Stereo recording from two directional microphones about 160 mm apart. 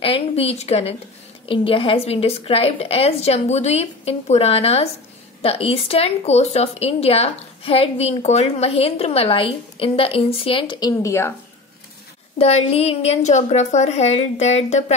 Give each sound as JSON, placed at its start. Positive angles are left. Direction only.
{"t": 0.0, "sound": "a woman's voice", "side_deg": 35}
{"t": 12.4, "sound": "a woman's voice", "side_deg": 40}